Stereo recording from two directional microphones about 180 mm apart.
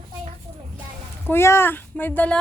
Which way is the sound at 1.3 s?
15° left (ahead or behind).